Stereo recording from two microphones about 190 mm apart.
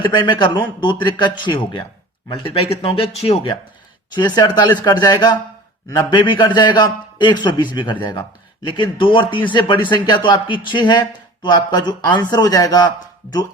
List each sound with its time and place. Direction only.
0.0 s a man's voice: 25° left (ahead or behind)